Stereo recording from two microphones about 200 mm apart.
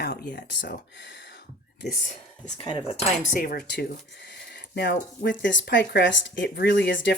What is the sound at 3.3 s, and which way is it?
Speech, 50° left (ahead or behind).